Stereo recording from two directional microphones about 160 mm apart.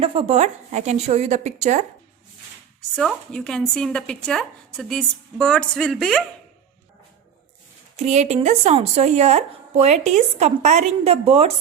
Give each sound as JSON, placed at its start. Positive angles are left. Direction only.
{"t": 0.0, "sound": "a woman's voice", "side_deg": -35}
{"t": 2.9, "sound": "speech", "side_deg": 5}
{"t": 7.9, "sound": "a woman's voice", "side_deg": -45}